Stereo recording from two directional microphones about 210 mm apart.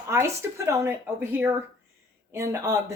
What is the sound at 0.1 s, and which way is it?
Speech, 15° right (ahead or behind).